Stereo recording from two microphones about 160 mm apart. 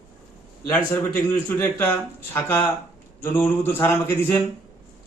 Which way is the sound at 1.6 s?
10° left (ahead or behind).